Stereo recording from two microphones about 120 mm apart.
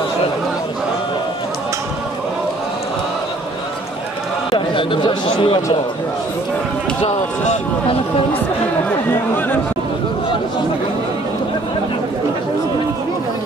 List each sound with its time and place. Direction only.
4.5 s speech: 45° left (ahead or behind)